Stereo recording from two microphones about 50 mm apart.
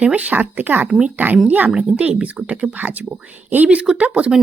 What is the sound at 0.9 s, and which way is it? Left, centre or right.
Speech, right.